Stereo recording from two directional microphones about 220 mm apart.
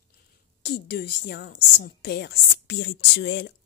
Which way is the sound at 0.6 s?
45° left (ahead or behind).